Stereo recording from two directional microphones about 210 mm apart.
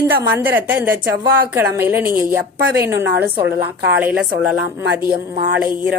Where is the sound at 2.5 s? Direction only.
50° right (ahead or behind).